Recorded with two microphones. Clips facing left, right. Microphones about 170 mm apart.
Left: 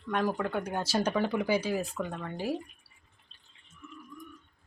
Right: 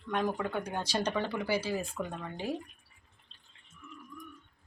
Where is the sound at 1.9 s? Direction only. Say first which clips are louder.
Left 2 dB; centre (ahead or behind).